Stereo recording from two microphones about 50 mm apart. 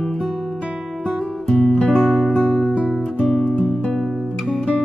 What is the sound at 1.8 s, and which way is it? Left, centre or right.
Music, centre.